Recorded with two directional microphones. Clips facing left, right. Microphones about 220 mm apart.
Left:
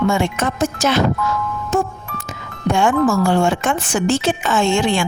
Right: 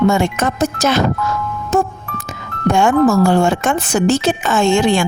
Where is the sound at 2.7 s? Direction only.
45° right (ahead or behind).